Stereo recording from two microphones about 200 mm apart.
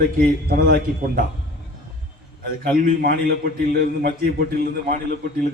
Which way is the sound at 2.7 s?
50° right (ahead or behind).